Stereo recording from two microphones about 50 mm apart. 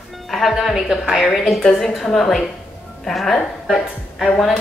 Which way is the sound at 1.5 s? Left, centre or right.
Centre.